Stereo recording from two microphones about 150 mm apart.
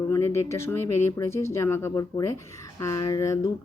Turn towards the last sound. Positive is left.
turn(degrees=20)  # may be behind; listen again after turning